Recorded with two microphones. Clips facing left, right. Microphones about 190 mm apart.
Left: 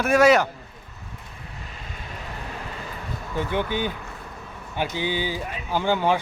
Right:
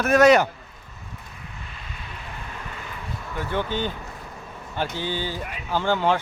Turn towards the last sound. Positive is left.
turn(degrees=15)  # may be behind; listen again after turning